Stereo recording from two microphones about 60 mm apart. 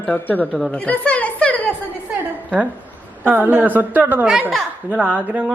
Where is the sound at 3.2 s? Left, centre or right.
Right.